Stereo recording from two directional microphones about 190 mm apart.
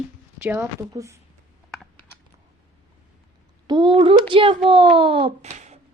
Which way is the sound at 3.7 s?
25° right (ahead or behind).